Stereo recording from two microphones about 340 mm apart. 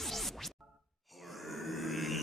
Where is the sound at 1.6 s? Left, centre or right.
Centre.